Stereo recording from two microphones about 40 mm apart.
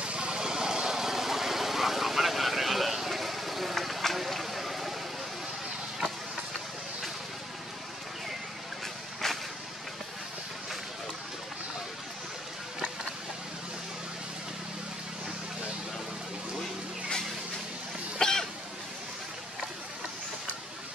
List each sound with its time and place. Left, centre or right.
0.0 s vehicle: right; by 4.9 s centre
9.2 s vehicle: centre
18.2 s cough: centre